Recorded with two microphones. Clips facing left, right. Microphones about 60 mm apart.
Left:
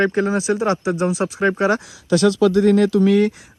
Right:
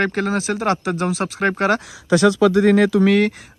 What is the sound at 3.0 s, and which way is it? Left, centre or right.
Speech, right.